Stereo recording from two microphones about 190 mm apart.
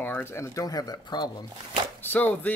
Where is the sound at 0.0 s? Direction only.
10° left (ahead or behind).